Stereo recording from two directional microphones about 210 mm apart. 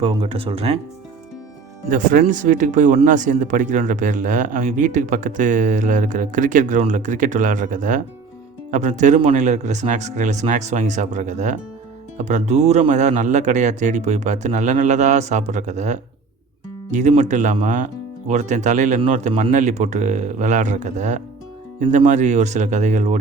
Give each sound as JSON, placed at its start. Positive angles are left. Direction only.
{"t": 0.0, "sound": "speech", "side_deg": -25}
{"t": 1.9, "sound": "speech", "side_deg": -40}